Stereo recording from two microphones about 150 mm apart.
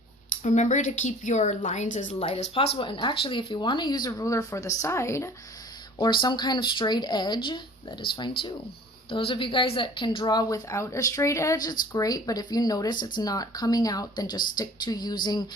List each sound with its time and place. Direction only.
0.4 s speech: 55° left (ahead or behind); by 5.3 s 20° left (ahead or behind)
6.0 s speech: 30° left (ahead or behind)